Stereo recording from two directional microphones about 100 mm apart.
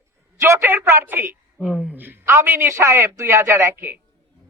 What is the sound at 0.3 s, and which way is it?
A woman's voice, 25° right (ahead or behind).